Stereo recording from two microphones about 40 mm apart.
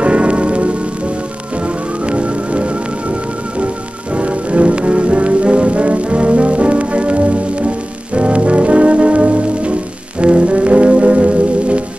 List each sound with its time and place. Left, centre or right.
0.0 s music: right